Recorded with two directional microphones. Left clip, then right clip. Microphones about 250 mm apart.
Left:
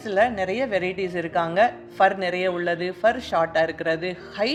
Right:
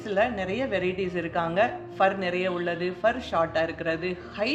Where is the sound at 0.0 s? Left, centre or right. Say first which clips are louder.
Left 4 dB; left.